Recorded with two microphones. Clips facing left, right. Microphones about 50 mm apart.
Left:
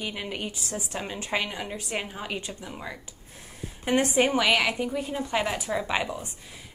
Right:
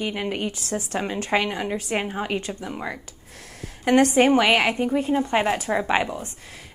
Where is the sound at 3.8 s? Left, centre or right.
Right.